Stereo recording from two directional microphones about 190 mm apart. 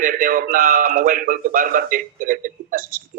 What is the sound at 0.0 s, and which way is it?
Speech, 45° right (ahead or behind).